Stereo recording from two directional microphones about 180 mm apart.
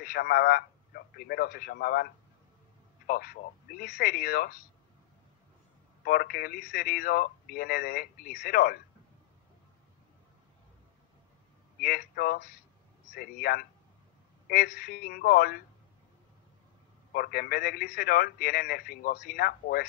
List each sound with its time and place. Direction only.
0.0 s speech: 55° left (ahead or behind)
3.1 s speech: 55° left (ahead or behind)
6.0 s speech: 55° left (ahead or behind)
11.8 s speech: 55° left (ahead or behind)
14.8 s speech: 55° left (ahead or behind)
17.1 s speech: 55° left (ahead or behind)